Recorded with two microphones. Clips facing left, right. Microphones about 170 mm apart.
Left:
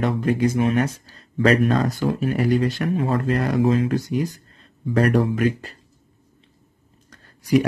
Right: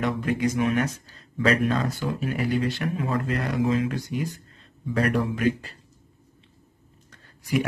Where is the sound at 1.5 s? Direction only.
45° left (ahead or behind).